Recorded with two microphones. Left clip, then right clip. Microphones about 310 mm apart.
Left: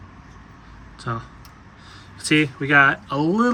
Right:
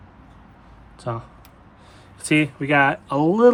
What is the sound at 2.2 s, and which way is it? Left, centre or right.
Speech, right.